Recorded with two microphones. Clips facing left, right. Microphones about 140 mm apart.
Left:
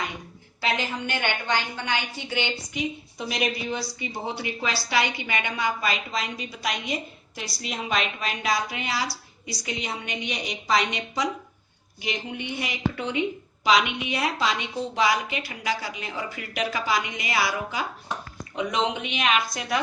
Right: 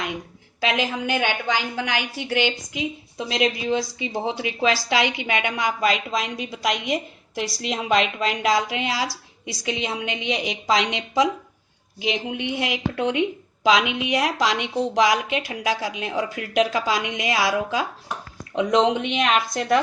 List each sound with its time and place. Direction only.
0.6 s a woman's voice: 90° right
19.5 s a woman's voice: 55° right (ahead or behind)